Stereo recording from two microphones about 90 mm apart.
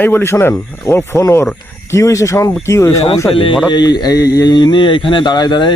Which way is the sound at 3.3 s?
90° left.